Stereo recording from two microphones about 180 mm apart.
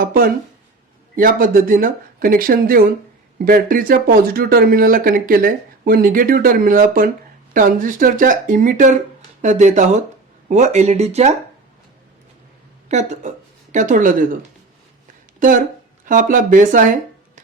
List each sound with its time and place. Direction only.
0.0 s speech: 55° right (ahead or behind); by 11.3 s 35° right (ahead or behind)
12.9 s speech: 40° right (ahead or behind)
15.4 s speech: 50° right (ahead or behind)